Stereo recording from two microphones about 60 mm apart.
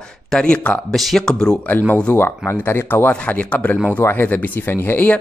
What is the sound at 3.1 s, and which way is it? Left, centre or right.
A man's voice, left.